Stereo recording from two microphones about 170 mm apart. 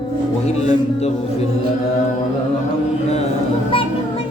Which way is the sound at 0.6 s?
40° left (ahead or behind).